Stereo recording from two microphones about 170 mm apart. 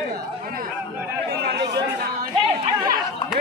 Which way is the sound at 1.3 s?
75° right (ahead or behind).